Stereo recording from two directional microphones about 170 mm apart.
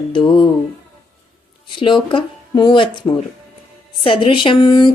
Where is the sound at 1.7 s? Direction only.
30° left (ahead or behind).